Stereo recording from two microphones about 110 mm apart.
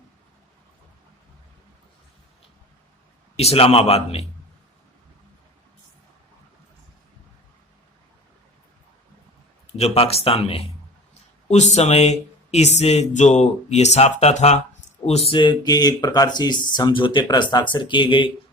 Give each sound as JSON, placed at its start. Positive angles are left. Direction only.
{"t": 3.3, "sound": "speech", "side_deg": 65}
{"t": 9.7, "sound": "speech", "side_deg": 70}
{"t": 11.1, "sound": "speech", "side_deg": 85}
{"t": 15.3, "sound": "speech", "side_deg": 45}